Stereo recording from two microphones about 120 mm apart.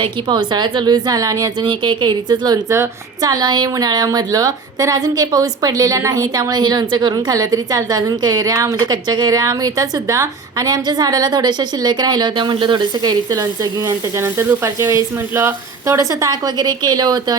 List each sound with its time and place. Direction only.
0.0 s a woman's voice: 35° right (ahead or behind)